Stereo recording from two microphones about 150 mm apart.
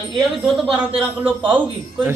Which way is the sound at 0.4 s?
Centre (ahead or behind).